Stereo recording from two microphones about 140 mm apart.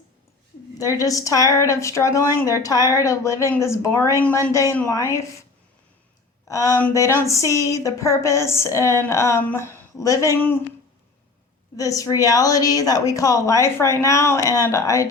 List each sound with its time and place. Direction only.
0.8 s speech: 25° left (ahead or behind)
6.5 s speech: 20° left (ahead or behind)
11.8 s speech: 25° left (ahead or behind)